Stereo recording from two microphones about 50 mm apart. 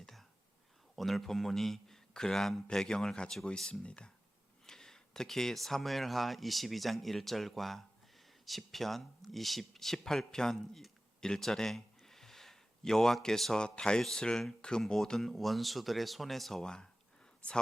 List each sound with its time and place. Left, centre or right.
0.0 s whispering: centre
0.9 s speech: centre; by 4.1 s left
4.6 s speech: centre
11.2 s a sound: centre
13.6 s speech: centre